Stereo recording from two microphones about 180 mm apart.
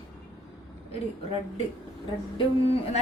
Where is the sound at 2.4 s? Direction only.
30° left (ahead or behind).